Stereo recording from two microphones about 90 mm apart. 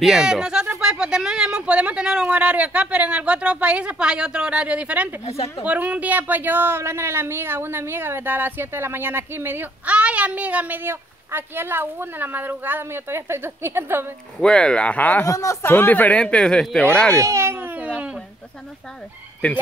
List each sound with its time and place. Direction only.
0.0 s speech: 5° right (ahead or behind); by 14.0 s 25° right (ahead or behind)
14.4 s speech: 10° left (ahead or behind)
15.2 s speech: 40° left (ahead or behind)
15.6 s speech: 25° left (ahead or behind); by 16.8 s 10° left (ahead or behind)
17.1 s baby cry: 35° right (ahead or behind); by 18.1 s 15° right (ahead or behind)
19.4 s speech: 15° left (ahead or behind)